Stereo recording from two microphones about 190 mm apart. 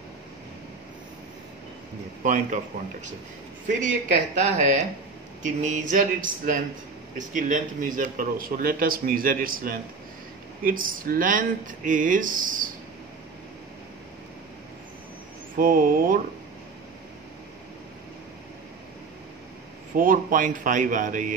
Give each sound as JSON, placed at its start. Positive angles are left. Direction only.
{"t": 2.2, "sound": "speech", "side_deg": -40}
{"t": 4.4, "sound": "a man's voice", "side_deg": -40}
{"t": 15.5, "sound": "a man's voice", "side_deg": -45}
{"t": 20.0, "sound": "a man's voice", "side_deg": -45}